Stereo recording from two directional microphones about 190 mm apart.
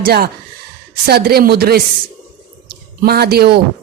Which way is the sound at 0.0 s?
50° right (ahead or behind).